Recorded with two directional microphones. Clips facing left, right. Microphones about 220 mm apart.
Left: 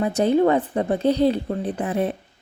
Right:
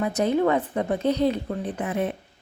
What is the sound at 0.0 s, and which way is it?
A woman's voice, 30° left (ahead or behind).